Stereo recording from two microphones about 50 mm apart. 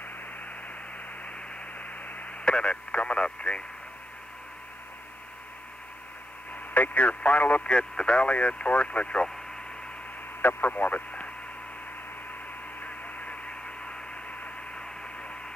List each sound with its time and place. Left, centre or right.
1.8 s radio: left
2.4 s speech: left
6.5 s speech: left
10.4 s speech: left
12.8 s radio: left